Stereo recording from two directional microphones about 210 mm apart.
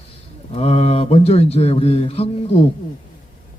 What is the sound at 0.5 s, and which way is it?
Speech, 30° left (ahead or behind).